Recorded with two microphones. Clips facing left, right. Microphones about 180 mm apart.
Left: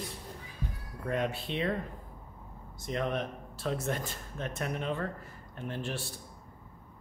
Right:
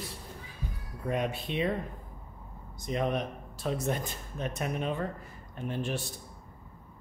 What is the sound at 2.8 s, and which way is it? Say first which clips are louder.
Speech: right 2 dB; 15° right (ahead or behind).